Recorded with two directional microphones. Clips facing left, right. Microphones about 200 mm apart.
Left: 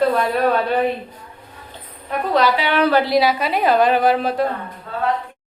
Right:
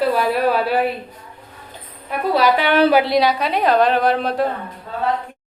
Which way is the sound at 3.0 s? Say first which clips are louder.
Even; centre (ahead or behind).